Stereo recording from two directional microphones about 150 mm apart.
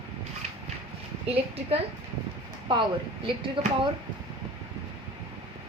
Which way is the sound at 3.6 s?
35° right (ahead or behind).